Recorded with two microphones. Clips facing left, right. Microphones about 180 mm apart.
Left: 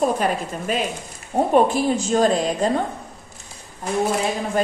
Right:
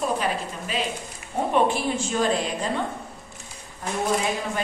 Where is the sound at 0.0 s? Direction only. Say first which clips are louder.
Left 5 dB; 50° left (ahead or behind).